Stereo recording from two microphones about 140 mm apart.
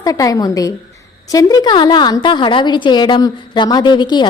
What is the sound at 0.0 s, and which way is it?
A woman's voice, 25° left (ahead or behind).